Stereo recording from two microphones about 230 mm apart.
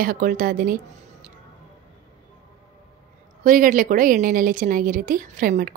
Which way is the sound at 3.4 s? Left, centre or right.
Right.